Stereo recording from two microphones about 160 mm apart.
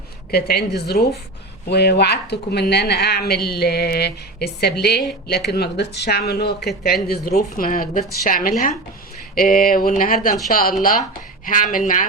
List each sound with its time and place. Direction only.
0.3 s a woman's voice: 80° left
7.5 s speech: 60° left (ahead or behind)